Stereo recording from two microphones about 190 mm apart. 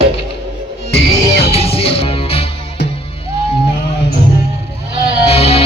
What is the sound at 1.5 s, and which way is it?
Music, 30° left (ahead or behind).